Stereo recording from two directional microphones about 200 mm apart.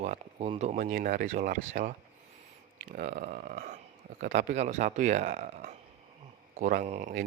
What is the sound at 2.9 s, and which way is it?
Speech, 45° right (ahead or behind).